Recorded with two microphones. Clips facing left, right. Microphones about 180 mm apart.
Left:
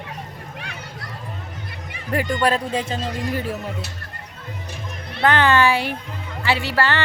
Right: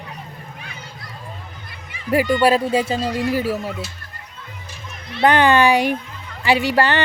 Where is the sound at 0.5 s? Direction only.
75° left (ahead or behind).